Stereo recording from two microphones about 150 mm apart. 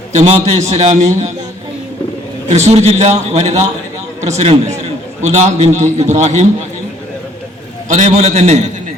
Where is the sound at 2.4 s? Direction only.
45° right (ahead or behind).